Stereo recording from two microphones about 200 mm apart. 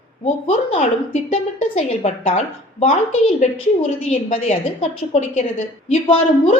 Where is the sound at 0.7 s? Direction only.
30° left (ahead or behind).